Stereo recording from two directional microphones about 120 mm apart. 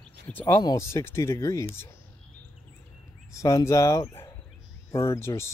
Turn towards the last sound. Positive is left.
turn(degrees=20)  # may be behind; listen again after turning